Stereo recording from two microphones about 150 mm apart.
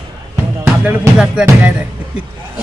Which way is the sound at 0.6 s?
10° right (ahead or behind).